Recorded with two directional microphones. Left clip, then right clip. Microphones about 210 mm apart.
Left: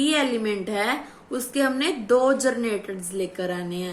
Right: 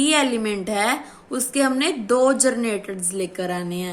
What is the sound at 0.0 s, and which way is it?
A woman's voice, 25° right (ahead or behind).